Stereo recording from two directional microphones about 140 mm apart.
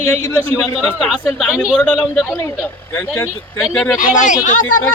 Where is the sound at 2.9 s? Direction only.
20° left (ahead or behind).